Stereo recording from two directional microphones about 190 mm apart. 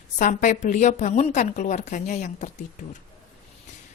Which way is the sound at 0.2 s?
45° left (ahead or behind).